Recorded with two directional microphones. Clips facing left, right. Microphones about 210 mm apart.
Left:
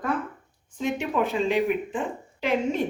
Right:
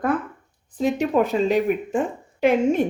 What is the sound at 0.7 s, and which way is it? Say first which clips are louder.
Speech: right 6 dB; 40° right (ahead or behind).